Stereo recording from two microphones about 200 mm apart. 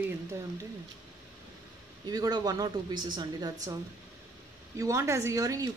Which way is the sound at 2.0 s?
20° right (ahead or behind).